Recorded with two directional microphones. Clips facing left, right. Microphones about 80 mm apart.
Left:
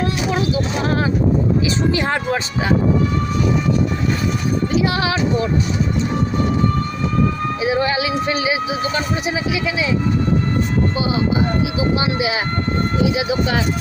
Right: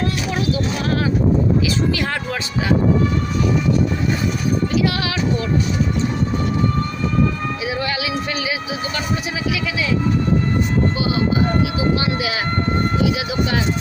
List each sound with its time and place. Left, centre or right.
0.0 s a sound: left
1.9 s speech: left
4.8 s speech: left
7.6 s speech: left
11.9 s speech: left